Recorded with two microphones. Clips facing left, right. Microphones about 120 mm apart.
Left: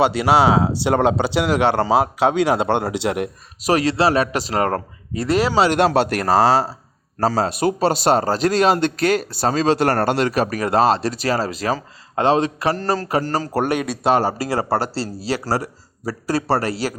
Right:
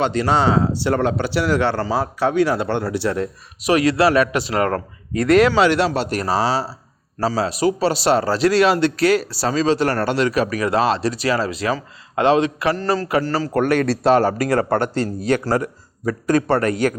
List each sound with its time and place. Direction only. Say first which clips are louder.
0.0 s speech: left 2 dB; 10° left (ahead or behind)
3.6 s speech: right 1 dB; 35° left (ahead or behind)
5.7 s speech: left 3 dB; 60° left (ahead or behind); by 13.5 s 45° left (ahead or behind)
13.8 s a man's voice: right 3 dB; 5° left (ahead or behind)
14.2 s speech: right 3 dB; 30° left (ahead or behind)